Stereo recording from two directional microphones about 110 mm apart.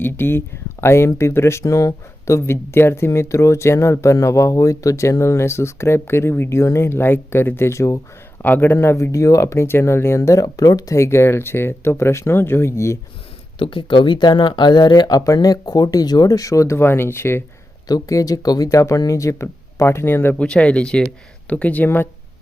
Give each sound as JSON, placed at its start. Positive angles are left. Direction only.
{"t": 0.0, "sound": "speech", "side_deg": 20}
{"t": 13.6, "sound": "speech", "side_deg": 50}
{"t": 17.8, "sound": "speech", "side_deg": 35}